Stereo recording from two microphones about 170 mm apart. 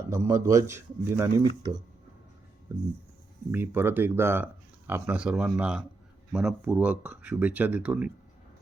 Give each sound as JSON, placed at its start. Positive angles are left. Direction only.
{"t": 0.1, "sound": "speech", "side_deg": -15}
{"t": 2.7, "sound": "speech", "side_deg": -15}